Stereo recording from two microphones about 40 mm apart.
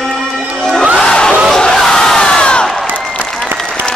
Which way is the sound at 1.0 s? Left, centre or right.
Left.